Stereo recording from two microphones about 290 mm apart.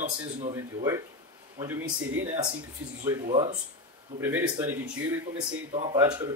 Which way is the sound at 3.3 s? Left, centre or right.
Right.